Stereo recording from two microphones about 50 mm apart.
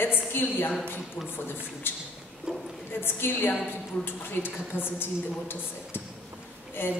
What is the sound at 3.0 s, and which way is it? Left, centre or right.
Speech, left.